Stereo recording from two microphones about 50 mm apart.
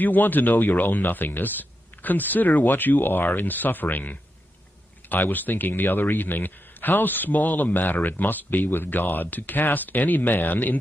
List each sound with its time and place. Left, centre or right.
0.0 s speech: left